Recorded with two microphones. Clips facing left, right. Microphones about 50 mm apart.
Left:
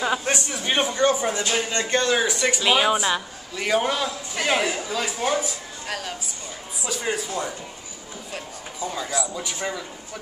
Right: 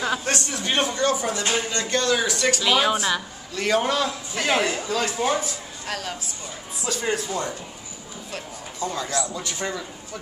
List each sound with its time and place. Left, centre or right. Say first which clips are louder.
0.0 s a man's voice: left 1 dB; centre